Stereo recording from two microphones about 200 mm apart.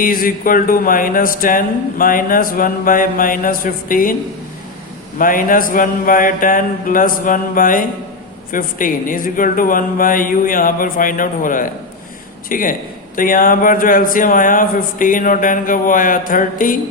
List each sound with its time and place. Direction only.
0.0 s music: 45° left (ahead or behind)
5.1 s music: 45° left (ahead or behind)